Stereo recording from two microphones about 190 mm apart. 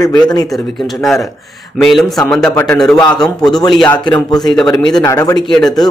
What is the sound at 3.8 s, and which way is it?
Speech, 5° left (ahead or behind).